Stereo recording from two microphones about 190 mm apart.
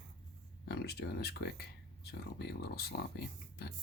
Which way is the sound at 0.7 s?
60° left (ahead or behind).